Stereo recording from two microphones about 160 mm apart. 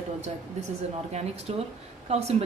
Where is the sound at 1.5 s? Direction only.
40° right (ahead or behind).